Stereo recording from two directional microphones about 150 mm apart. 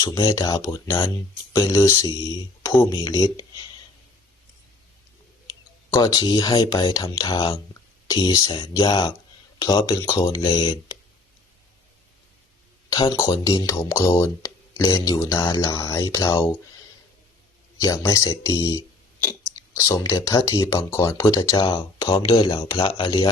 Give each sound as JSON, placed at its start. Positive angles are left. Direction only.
{"t": 0.0, "sound": "speech", "side_deg": 25}
{"t": 5.9, "sound": "speech", "side_deg": 25}
{"t": 12.9, "sound": "speech", "side_deg": 35}
{"t": 17.7, "sound": "speech", "side_deg": 25}